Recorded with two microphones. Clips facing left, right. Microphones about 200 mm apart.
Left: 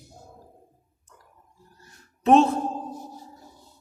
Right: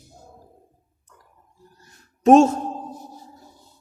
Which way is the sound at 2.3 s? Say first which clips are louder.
Right 5 dB; 45° right (ahead or behind).